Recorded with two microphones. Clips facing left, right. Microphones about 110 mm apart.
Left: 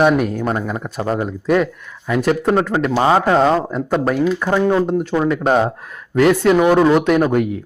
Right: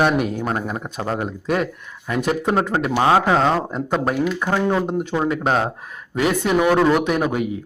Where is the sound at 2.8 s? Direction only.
10° right (ahead or behind).